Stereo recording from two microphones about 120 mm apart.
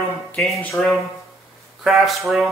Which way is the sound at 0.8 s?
5° left (ahead or behind).